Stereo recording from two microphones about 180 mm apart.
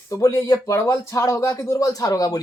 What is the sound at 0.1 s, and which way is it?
Speech, 15° left (ahead or behind).